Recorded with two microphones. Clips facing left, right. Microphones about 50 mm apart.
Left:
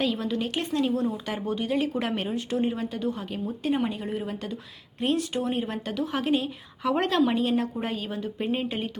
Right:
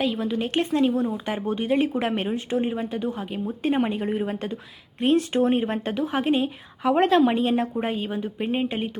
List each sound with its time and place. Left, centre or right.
0.0 s a woman's voice: centre
3.6 s speech: right